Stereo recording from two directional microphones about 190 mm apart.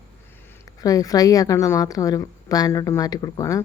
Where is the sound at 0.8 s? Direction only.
20° left (ahead or behind).